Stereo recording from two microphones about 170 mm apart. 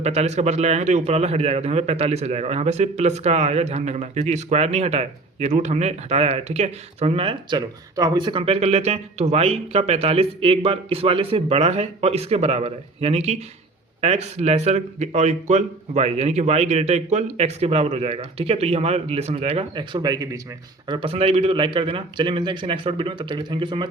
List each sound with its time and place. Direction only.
0.0 s a man's voice: 40° right (ahead or behind)